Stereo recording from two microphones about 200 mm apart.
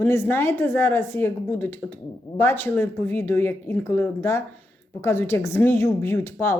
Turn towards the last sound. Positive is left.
turn(degrees=15)  # may be behind; listen again after turning